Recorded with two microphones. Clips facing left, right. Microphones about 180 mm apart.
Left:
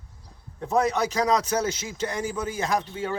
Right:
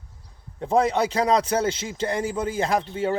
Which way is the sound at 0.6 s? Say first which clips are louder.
Right 3 dB; 30° right (ahead or behind).